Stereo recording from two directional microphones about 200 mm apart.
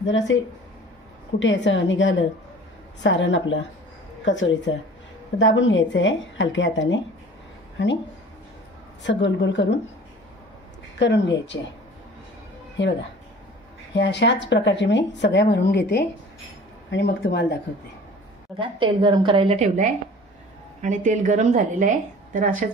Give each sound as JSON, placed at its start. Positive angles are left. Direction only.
{"t": 0.3, "sound": "a woman's voice", "side_deg": 70}
{"t": 9.0, "sound": "a woman's voice", "side_deg": 65}
{"t": 11.0, "sound": "a woman's voice", "side_deg": 60}
{"t": 12.8, "sound": "a woman's voice", "side_deg": 60}
{"t": 18.6, "sound": "a woman's voice", "side_deg": -25}